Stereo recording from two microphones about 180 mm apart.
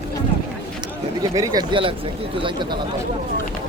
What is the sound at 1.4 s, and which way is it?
Speech, 20° right (ahead or behind).